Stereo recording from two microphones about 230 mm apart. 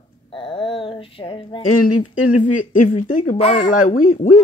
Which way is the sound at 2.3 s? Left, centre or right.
Left.